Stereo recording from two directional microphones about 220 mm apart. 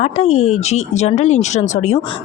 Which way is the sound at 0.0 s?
30° left (ahead or behind).